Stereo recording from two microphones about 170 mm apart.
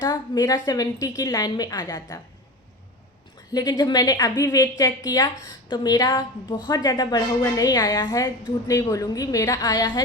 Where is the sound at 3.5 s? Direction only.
20° left (ahead or behind).